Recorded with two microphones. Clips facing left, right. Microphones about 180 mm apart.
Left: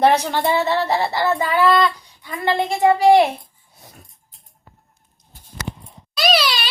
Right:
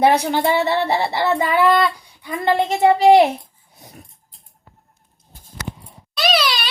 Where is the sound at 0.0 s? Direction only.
10° right (ahead or behind).